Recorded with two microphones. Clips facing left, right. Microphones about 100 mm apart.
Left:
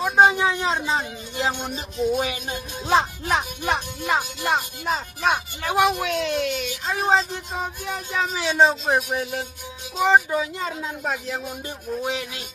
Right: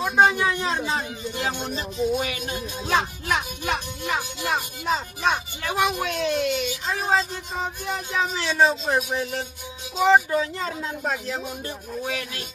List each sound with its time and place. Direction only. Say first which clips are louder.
0.2 s a man's voice: left 2 dB; 15° left (ahead or behind)
1.4 s music: left 4 dB; 20° left (ahead or behind)
2.0 s speech: left 3 dB; 20° left (ahead or behind)
4.8 s speech: right 1 dB; centre (ahead or behind)
5.9 s speech: left 2 dB; centre (ahead or behind)
11.6 s speech: left 3 dB; 20° left (ahead or behind)